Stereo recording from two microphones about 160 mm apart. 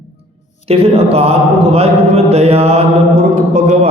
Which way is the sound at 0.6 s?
40° right (ahead or behind).